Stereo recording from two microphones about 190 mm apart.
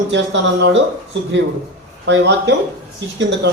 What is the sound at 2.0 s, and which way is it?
Speech, 70° right (ahead or behind).